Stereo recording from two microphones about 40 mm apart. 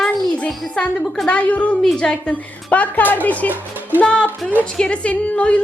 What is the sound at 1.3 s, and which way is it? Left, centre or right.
Speech, left.